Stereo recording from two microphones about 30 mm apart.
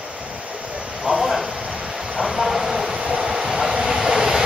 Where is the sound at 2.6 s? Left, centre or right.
Centre.